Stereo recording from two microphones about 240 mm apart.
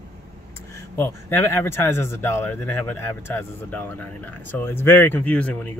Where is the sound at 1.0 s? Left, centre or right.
Centre.